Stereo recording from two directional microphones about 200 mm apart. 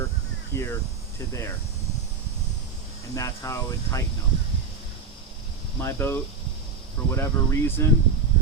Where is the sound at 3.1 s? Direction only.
15° left (ahead or behind).